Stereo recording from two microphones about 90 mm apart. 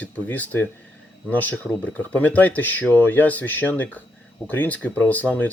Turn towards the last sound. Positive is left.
turn(degrees=15)  # may be behind; listen again after turning